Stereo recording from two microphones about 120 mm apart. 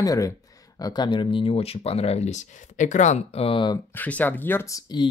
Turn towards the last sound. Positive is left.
turn(degrees=25)  # may be behind; listen again after turning